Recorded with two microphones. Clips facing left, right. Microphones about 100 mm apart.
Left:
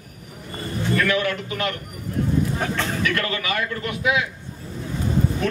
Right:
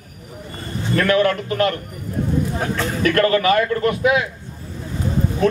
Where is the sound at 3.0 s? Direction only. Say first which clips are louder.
Right 14 dB; 40° right (ahead or behind).